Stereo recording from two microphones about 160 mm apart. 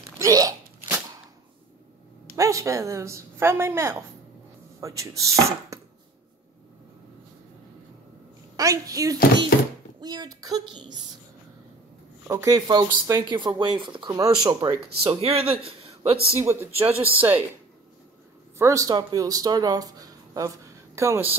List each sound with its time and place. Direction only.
0.2 s crunch: 20° right (ahead or behind)
0.8 s a sound: 15° right (ahead or behind)
2.3 s a woman's voice: 20° right (ahead or behind)
8.5 s speech: 20° right (ahead or behind)
12.3 s speech: 20° right (ahead or behind)
15.1 s speech: 40° right (ahead or behind)
16.3 s speech: 15° right (ahead or behind)
18.6 s speech: 20° right (ahead or behind)